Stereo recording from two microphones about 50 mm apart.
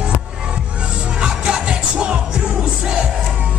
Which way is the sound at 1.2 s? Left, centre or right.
Centre.